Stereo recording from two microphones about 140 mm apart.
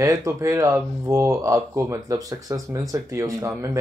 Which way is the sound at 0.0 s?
25° right (ahead or behind).